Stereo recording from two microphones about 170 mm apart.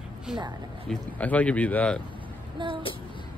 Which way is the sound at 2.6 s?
30° right (ahead or behind).